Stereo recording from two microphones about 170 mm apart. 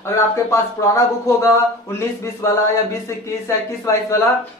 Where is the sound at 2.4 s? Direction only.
15° left (ahead or behind).